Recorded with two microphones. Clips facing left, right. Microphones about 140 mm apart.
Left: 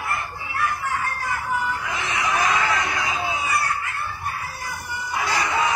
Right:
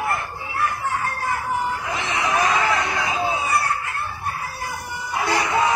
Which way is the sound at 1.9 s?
30° right (ahead or behind).